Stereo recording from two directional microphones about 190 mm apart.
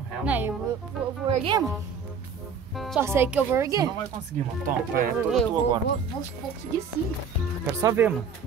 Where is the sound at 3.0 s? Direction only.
10° right (ahead or behind).